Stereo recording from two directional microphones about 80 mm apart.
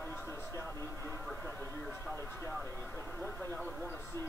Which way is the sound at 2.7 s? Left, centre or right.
Left.